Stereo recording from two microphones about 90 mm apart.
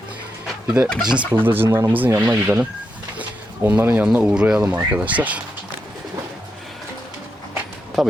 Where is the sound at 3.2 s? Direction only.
20° right (ahead or behind).